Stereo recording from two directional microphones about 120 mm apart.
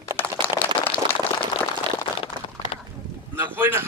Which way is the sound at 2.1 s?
45° left (ahead or behind).